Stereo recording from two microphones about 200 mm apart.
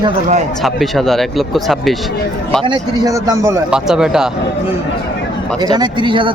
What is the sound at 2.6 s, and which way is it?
A man's voice, 20° right (ahead or behind).